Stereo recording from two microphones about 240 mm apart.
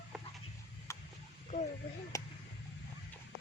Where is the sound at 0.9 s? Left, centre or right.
Centre.